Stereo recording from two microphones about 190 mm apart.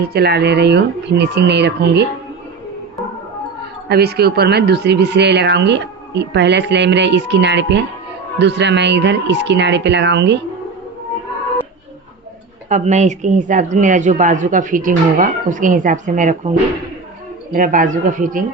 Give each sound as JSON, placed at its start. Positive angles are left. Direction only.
{"t": 0.0, "sound": "speech", "side_deg": -55}
{"t": 3.8, "sound": "speech", "side_deg": -55}
{"t": 12.6, "sound": "speech", "side_deg": -40}
{"t": 17.5, "sound": "speech", "side_deg": -45}